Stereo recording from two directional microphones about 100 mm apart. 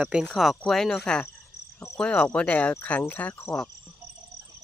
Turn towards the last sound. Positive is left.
turn(degrees=20)  # may be behind; listen again after turning